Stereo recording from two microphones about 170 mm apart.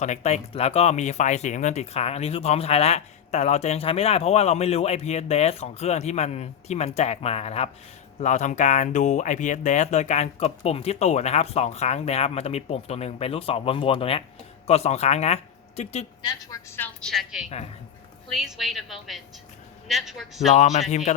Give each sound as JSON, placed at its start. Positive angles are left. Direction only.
{"t": 0.0, "sound": "speech", "side_deg": 40}
{"t": 16.2, "sound": "a woman's voice", "side_deg": 20}
{"t": 20.5, "sound": "speech", "side_deg": 40}